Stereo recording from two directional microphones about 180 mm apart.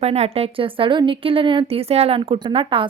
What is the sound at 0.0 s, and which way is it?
A woman's voice, 35° right (ahead or behind).